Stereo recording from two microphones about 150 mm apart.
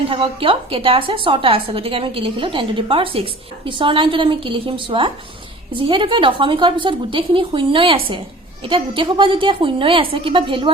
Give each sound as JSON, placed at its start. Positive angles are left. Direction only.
{"t": 0.1, "sound": "a woman's voice", "side_deg": -35}